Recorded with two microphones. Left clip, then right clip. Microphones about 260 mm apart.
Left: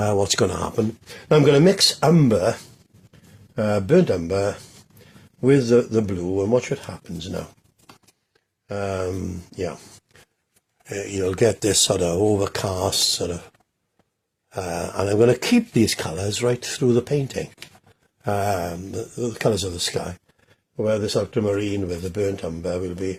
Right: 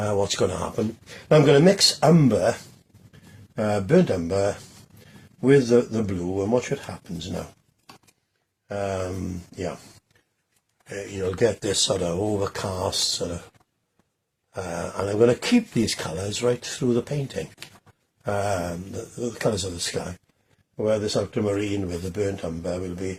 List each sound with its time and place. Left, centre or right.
0.0 s speech: left
8.6 s speech: left
10.8 s speech: left
14.5 s speech: left